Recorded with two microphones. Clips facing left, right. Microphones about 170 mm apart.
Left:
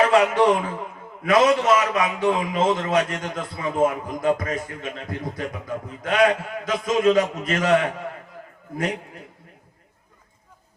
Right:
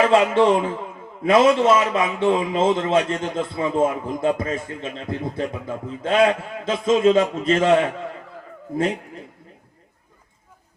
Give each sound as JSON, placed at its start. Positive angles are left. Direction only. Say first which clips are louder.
{"t": 0.1, "sound": "a man's voice", "louder": "right 2 dB", "side_deg": -25}